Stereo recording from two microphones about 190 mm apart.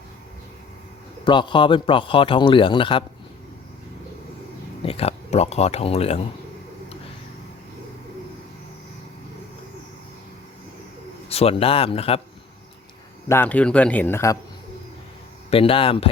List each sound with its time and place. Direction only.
1.2 s a man's voice: 25° left (ahead or behind)
4.8 s speech: 30° left (ahead or behind)
11.3 s speech: 30° left (ahead or behind)
13.2 s speech: 10° left (ahead or behind)
15.4 s a man's voice: 30° left (ahead or behind)